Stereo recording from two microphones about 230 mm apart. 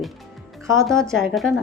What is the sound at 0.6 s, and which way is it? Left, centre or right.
Speech, centre.